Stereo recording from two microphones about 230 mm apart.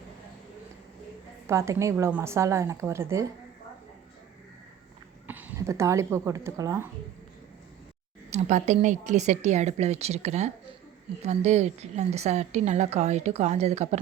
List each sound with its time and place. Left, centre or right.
1.5 s a woman's voice: centre
5.3 s speech: centre
8.3 s a woman's voice: right